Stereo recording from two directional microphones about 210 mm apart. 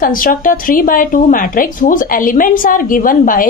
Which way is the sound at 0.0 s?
40° left (ahead or behind).